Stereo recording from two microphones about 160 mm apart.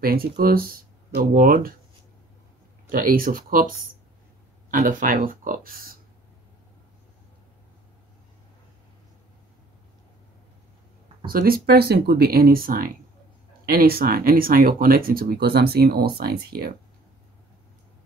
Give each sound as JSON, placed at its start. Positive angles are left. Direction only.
{"t": 0.0, "sound": "speech", "side_deg": -70}
{"t": 2.9, "sound": "speech", "side_deg": -65}
{"t": 11.2, "sound": "speech", "side_deg": -65}